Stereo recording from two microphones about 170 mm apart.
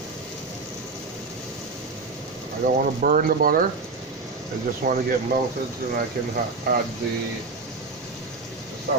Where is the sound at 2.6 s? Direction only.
55° right (ahead or behind).